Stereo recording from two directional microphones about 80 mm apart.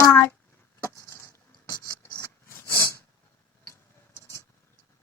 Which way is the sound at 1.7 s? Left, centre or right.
Left.